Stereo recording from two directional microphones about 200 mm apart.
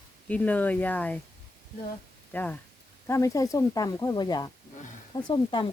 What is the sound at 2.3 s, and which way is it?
Speech, 10° left (ahead or behind).